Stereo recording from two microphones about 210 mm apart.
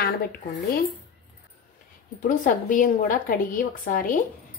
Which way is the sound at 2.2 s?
40° left (ahead or behind).